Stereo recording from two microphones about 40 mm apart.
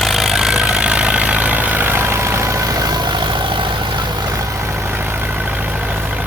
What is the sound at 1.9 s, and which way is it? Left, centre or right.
Vehicle, right.